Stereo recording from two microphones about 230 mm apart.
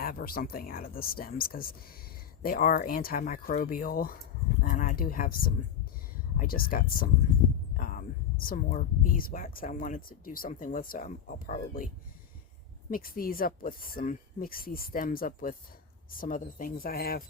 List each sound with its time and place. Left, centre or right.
0.0 s speech: left
7.8 s a sound: left
8.4 s speech: left
12.9 s speech: left